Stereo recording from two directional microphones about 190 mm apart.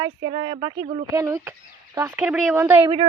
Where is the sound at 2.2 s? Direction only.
5° right (ahead or behind).